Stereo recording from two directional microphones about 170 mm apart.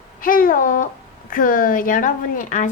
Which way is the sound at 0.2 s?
55° left (ahead or behind).